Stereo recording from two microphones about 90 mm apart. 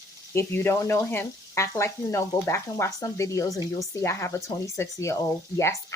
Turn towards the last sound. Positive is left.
turn(degrees=35)  # may be behind; listen again after turning